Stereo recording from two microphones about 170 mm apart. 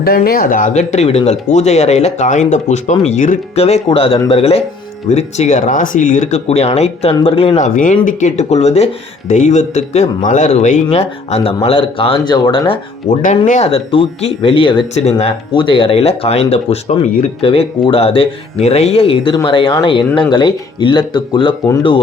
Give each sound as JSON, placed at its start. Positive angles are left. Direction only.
{"t": 0.0, "sound": "speech", "side_deg": 60}
{"t": 13.1, "sound": "speech", "side_deg": 40}
{"t": 14.9, "sound": "speech", "side_deg": 40}